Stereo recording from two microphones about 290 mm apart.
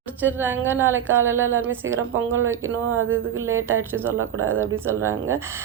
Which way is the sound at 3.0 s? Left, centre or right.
Right.